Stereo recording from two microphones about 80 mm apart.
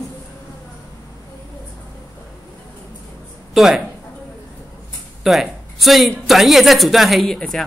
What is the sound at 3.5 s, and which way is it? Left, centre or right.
Speech, centre.